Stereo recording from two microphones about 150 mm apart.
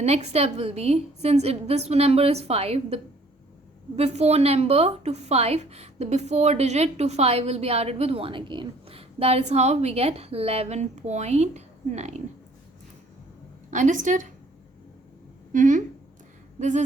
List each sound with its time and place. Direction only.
0.0 s a woman's voice: 45° right (ahead or behind)
13.7 s a woman's voice: 55° right (ahead or behind)
15.5 s a woman's voice: 55° right (ahead or behind)